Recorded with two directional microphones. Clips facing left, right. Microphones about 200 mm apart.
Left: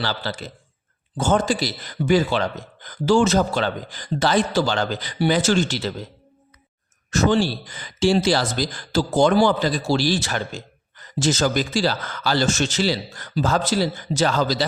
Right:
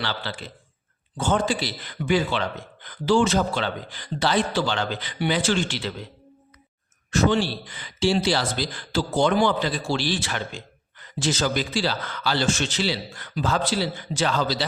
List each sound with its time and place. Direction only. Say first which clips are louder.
0.0 s speech: left 4 dB; 40° left (ahead or behind)
7.1 s speech: left 2 dB; 45° left (ahead or behind)